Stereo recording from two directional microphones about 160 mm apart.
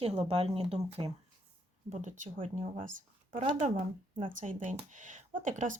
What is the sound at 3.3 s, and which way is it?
Speech, 40° right (ahead or behind).